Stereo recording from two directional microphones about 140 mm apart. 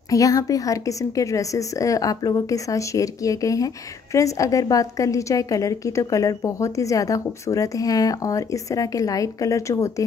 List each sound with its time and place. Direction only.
0.1 s a woman's voice: 25° left (ahead or behind)